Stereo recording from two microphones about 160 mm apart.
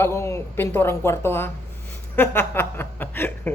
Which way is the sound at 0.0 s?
15° left (ahead or behind).